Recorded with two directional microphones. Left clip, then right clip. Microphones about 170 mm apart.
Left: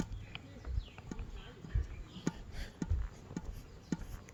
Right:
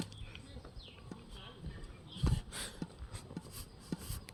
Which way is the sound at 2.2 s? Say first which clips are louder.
Even; 40° right (ahead or behind).